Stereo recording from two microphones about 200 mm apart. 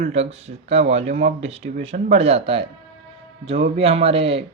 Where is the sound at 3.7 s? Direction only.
30° right (ahead or behind).